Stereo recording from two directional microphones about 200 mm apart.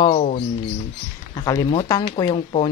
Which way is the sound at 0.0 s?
30° left (ahead or behind).